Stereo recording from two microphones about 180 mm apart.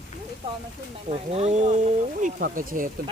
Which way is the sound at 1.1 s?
35° right (ahead or behind).